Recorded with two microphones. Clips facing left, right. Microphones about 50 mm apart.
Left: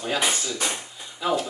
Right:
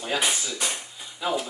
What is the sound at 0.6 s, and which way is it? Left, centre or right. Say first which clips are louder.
Drawer open or close: left 2 dB; centre.